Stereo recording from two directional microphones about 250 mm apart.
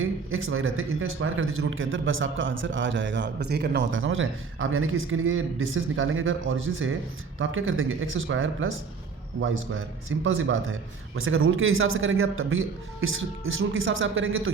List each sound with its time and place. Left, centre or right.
0.0 s a man's voice: right